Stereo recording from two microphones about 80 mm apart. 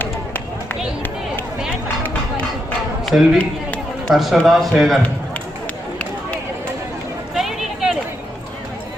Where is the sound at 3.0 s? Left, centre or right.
Centre.